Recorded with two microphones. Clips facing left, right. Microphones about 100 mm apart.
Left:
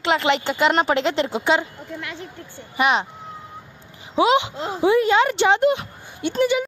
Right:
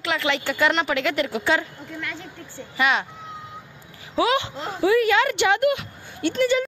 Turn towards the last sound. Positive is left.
turn(degrees=15)  # may be behind; listen again after turning